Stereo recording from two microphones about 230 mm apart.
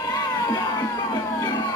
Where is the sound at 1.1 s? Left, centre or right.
Centre.